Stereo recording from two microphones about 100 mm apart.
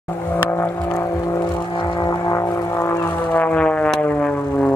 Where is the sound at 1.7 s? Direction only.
45° left (ahead or behind).